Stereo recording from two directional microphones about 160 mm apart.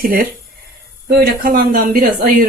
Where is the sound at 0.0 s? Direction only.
65° right (ahead or behind).